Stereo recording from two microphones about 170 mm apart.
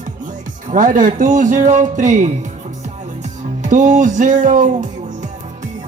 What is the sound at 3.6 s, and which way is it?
Speech, 45° right (ahead or behind).